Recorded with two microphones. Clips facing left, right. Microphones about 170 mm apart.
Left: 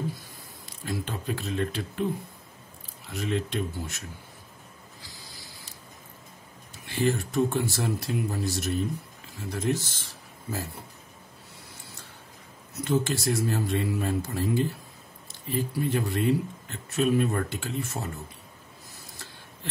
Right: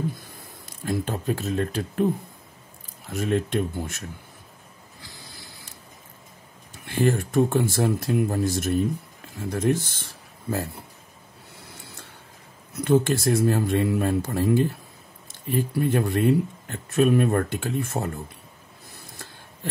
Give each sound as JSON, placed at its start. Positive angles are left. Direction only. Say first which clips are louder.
{"t": 0.7, "sound": "speech", "louder": "right 6 dB", "side_deg": -45}
{"t": 3.1, "sound": "speech", "louder": "right 5 dB", "side_deg": -50}
{"t": 6.7, "sound": "speech", "louder": "right 4 dB", "side_deg": -50}
{"t": 12.7, "sound": "speech", "louder": "right 6 dB", "side_deg": -55}